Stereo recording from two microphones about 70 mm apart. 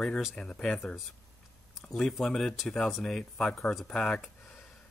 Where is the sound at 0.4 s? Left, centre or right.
Centre.